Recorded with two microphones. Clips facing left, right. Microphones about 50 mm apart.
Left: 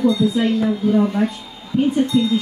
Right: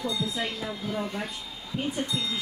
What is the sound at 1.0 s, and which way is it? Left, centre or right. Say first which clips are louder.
Speech: left 13 dB; left.